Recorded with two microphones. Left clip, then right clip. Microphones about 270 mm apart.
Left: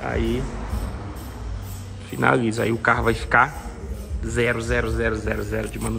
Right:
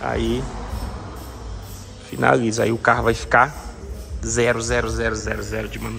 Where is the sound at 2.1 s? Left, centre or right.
Centre.